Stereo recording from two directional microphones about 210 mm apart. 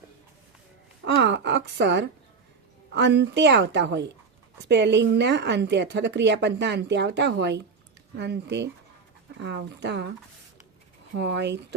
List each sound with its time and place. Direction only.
1.0 s a woman's voice: 55° right (ahead or behind)
11.2 s a woman's voice: 55° right (ahead or behind)